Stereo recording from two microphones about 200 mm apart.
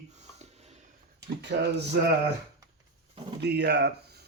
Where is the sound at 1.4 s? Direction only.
60° right (ahead or behind).